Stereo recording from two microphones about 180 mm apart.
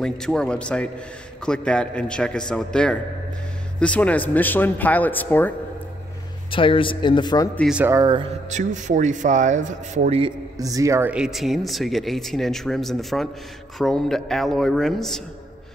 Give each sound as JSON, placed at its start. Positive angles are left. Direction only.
{"t": 0.0, "sound": "a man's voice", "side_deg": 5}
{"t": 6.5, "sound": "speech", "side_deg": 30}
{"t": 7.5, "sound": "a man's voice", "side_deg": 0}
{"t": 7.8, "sound": "speech", "side_deg": -20}
{"t": 8.5, "sound": "speech", "side_deg": -40}
{"t": 10.6, "sound": "a man's voice", "side_deg": -20}